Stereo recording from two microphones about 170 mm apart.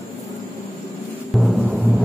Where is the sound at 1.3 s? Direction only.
5° right (ahead or behind).